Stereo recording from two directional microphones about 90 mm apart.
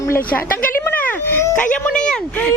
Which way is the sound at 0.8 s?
20° left (ahead or behind).